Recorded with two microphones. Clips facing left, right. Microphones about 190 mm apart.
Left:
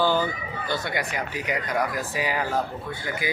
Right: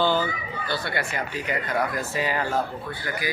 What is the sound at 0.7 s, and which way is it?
Speech, 15° left (ahead or behind).